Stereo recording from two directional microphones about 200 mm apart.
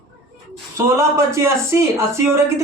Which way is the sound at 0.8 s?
15° right (ahead or behind).